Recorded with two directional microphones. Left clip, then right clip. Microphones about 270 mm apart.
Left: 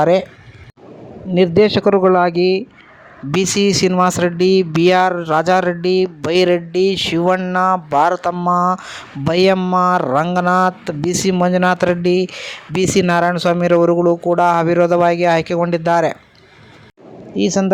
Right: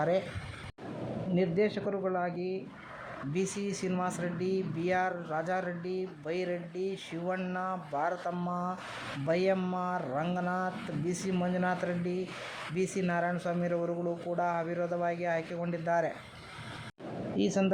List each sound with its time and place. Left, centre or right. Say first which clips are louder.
1.4 s speech: left 18 dB; left
17.3 s a man's voice: left 13 dB; left